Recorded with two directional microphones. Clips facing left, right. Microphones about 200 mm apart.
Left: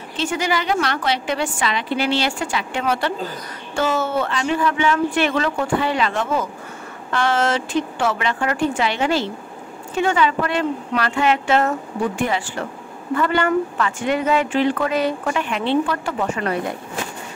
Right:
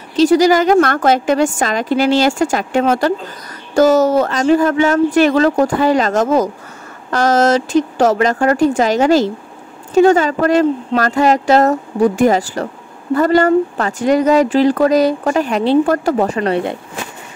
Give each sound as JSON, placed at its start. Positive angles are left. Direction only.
{"t": 0.1, "sound": "a woman's voice", "side_deg": -40}